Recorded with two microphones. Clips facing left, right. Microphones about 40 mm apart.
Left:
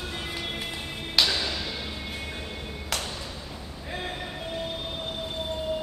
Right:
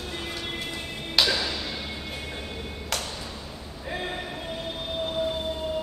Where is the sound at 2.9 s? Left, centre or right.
Centre.